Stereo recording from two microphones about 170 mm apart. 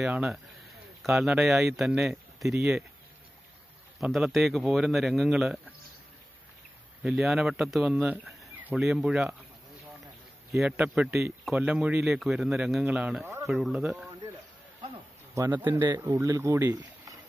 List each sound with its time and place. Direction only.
0.0 s speech: 5° right (ahead or behind)
4.0 s speech: centre (ahead or behind)
7.0 s speech: 5° right (ahead or behind)
10.5 s a man's voice: 5° right (ahead or behind)
15.3 s a man's voice: 15° right (ahead or behind)